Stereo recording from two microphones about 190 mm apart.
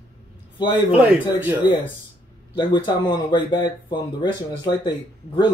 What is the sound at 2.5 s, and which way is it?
Speech, 25° left (ahead or behind).